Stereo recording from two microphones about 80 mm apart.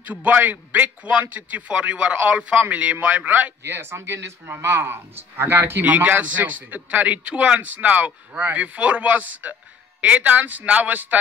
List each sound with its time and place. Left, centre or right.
0.0 s a man's voice: centre